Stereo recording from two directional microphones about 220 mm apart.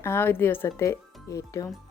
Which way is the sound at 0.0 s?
10° left (ahead or behind).